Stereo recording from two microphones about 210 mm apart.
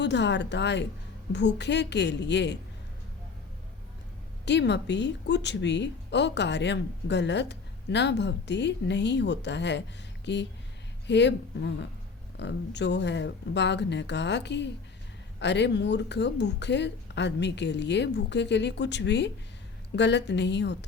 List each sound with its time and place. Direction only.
0.0 s a woman's voice: 55° left (ahead or behind)
4.4 s a woman's voice: 55° left (ahead or behind)